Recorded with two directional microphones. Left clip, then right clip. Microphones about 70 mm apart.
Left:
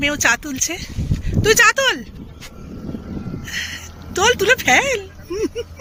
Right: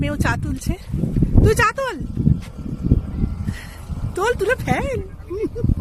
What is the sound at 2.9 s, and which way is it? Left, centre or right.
Vehicle, right.